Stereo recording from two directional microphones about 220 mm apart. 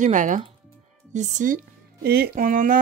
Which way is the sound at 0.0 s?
35° right (ahead or behind).